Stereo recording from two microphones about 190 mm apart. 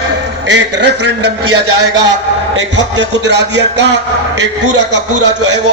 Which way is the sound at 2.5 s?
70° right (ahead or behind).